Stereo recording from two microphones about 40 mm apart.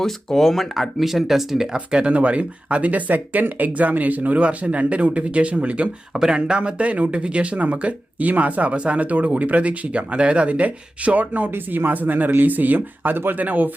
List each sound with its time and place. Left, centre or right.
0.0 s speech: centre; by 4.4 s right
4.4 s speech: right
6.1 s speech: centre
6.6 s speech: right
11.5 s speech: right